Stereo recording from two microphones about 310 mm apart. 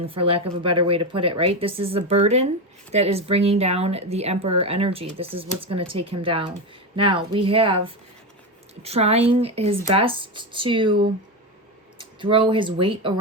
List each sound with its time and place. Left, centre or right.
0.0 s speech: centre
8.8 s speech: centre